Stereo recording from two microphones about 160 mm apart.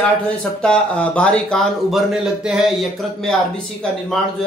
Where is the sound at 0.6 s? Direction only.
5° left (ahead or behind).